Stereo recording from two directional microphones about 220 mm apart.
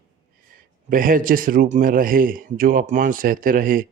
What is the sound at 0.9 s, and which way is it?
A man's voice, 40° right (ahead or behind).